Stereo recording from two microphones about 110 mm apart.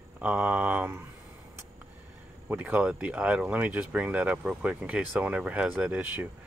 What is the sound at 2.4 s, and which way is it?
Speech, 15° right (ahead or behind).